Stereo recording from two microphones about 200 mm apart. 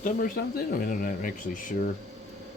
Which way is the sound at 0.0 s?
45° left (ahead or behind).